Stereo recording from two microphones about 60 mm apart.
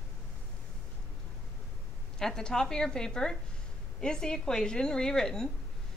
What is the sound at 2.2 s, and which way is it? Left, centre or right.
A woman's voice, centre.